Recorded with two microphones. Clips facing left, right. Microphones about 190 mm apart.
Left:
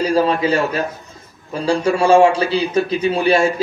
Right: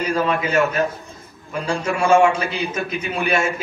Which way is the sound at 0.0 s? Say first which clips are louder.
Left 5 dB; 30° left (ahead or behind).